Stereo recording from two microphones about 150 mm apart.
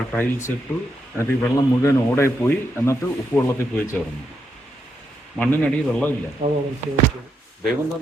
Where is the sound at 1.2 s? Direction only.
20° left (ahead or behind).